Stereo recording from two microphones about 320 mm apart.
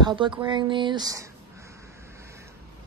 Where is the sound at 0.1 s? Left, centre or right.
Centre.